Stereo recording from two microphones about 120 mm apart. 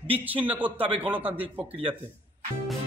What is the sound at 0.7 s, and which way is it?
Speech, 50° right (ahead or behind).